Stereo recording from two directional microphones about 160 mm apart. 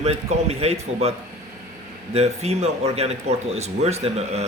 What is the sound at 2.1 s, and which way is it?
Speech, 40° right (ahead or behind).